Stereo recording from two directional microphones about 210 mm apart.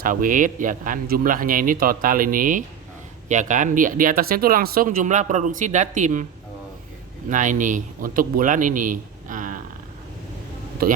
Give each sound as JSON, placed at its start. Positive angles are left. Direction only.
{"t": 0.0, "sound": "speech", "side_deg": -40}
{"t": 7.3, "sound": "speech", "side_deg": -35}
{"t": 10.8, "sound": "a man's voice", "side_deg": -45}